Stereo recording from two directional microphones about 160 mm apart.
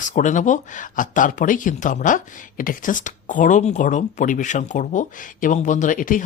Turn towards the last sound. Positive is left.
turn(degrees=55)  # may be behind; listen again after turning